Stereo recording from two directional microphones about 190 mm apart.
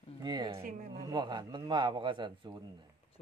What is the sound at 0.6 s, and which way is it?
Speech, 50° right (ahead or behind).